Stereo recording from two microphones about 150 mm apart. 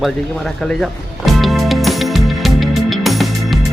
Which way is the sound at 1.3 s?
Centre (ahead or behind).